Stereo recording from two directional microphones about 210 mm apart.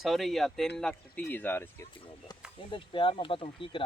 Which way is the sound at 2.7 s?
25° left (ahead or behind).